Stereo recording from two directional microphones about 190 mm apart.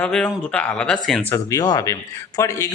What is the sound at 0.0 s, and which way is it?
A man's voice, 5° left (ahead or behind).